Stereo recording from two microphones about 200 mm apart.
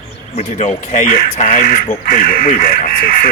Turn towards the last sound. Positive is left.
turn(degrees=45)  # may be behind; listen again after turning